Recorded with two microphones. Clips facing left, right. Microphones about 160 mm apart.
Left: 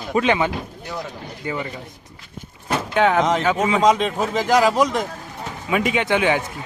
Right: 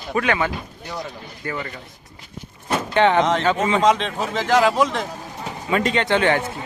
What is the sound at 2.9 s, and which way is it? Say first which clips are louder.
Speech: right 1 dB; 5° left (ahead or behind).